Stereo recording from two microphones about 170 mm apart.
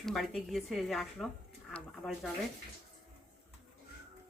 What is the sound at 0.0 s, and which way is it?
A woman's voice, centre (ahead or behind).